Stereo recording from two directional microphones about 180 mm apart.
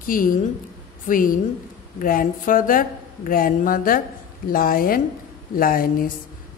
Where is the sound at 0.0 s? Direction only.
50° left (ahead or behind).